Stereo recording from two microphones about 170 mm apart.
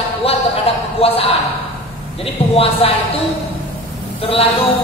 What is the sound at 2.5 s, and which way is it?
Speech, 35° left (ahead or behind).